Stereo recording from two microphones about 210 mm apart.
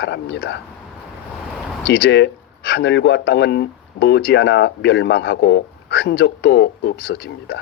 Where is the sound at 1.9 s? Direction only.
55° left (ahead or behind).